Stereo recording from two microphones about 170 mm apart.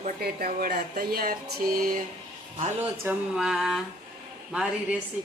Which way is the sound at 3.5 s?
Centre (ahead or behind).